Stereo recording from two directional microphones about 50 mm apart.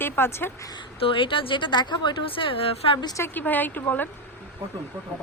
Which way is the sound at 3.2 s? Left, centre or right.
Left.